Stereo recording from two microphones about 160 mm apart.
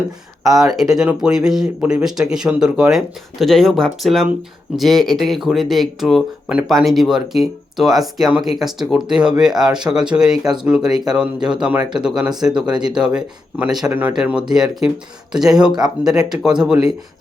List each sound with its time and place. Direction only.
0.4 s speech: centre (ahead or behind)